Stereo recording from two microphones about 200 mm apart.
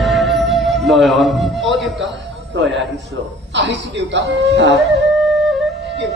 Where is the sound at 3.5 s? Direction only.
65° right (ahead or behind).